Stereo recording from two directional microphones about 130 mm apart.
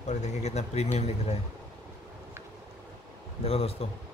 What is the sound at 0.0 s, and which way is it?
Speech, 65° left (ahead or behind).